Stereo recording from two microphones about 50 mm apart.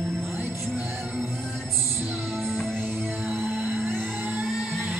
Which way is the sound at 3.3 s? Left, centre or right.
Right.